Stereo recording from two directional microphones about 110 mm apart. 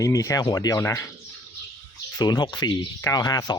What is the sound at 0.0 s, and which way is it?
Speech, 30° left (ahead or behind).